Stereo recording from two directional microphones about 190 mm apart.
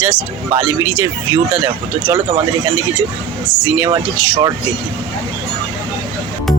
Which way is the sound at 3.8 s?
20° right (ahead or behind).